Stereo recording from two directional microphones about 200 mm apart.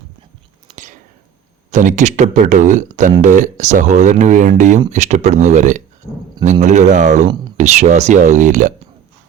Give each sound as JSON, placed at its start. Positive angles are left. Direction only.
{"t": 1.7, "sound": "speech", "side_deg": -40}